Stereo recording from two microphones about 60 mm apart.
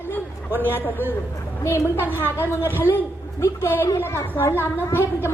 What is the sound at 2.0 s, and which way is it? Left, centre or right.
Speech, right.